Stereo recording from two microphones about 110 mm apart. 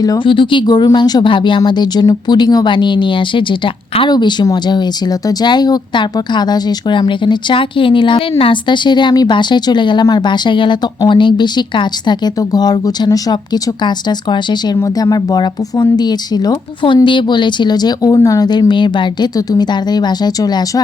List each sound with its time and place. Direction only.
0.3 s a woman's voice: 50° left (ahead or behind)